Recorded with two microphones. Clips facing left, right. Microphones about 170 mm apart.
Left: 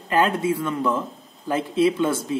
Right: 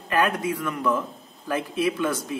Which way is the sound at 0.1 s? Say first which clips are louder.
Left 3 dB; 25° left (ahead or behind).